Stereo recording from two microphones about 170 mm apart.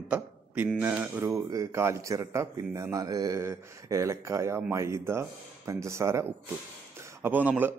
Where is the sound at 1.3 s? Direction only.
20° right (ahead or behind).